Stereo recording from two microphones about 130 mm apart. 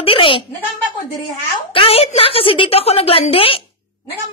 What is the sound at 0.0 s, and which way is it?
Speech, 45° left (ahead or behind).